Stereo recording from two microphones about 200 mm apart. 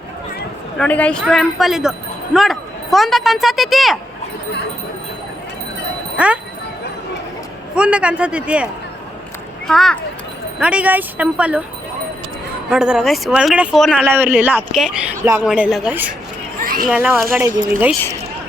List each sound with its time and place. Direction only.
0.8 s speech: 5° left (ahead or behind)
6.1 s speech: 5° right (ahead or behind)
7.8 s speech: 5° right (ahead or behind)
9.6 s speech: centre (ahead or behind)
12.7 s speech: 5° right (ahead or behind)
16.6 s a sound: 45° right (ahead or behind)
16.8 s speech: 5° right (ahead or behind)